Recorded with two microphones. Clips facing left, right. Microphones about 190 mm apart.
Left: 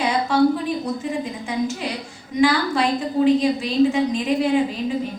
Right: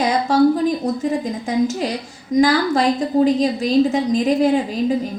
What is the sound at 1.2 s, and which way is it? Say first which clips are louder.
A woman's voice: right 5 dB; 40° right (ahead or behind).